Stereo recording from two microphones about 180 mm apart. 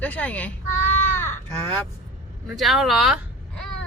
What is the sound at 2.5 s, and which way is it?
Speech, centre (ahead or behind).